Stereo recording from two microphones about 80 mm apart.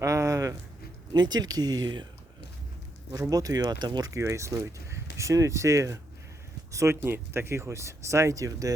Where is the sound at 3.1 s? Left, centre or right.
Right.